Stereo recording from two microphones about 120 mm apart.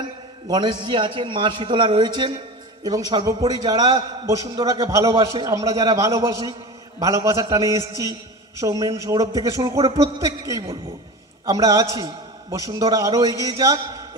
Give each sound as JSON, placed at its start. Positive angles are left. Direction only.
{"t": 0.4, "sound": "a man's voice", "side_deg": -40}